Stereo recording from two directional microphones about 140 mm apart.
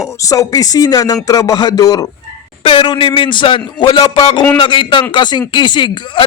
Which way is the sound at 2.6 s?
35° left (ahead or behind).